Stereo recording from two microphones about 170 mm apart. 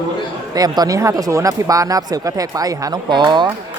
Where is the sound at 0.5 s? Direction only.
20° right (ahead or behind).